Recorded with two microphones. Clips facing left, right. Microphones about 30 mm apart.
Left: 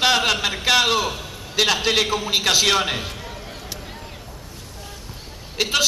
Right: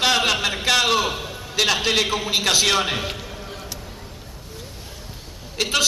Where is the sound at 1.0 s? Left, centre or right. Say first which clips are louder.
Right 1 dB; centre.